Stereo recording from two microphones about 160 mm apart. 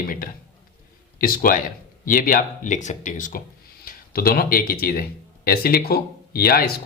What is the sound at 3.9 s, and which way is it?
Speech, 70° left (ahead or behind).